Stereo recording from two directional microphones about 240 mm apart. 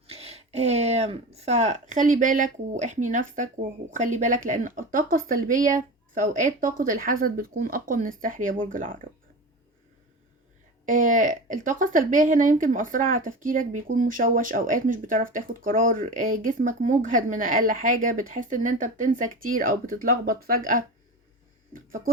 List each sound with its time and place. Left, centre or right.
0.1 s speech: right
10.8 s speech: right